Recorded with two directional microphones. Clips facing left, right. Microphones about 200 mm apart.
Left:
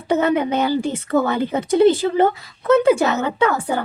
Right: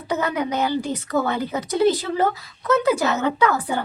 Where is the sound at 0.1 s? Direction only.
25° left (ahead or behind).